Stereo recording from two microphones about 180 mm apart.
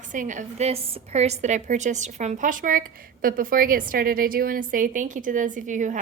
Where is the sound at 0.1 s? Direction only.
45° right (ahead or behind).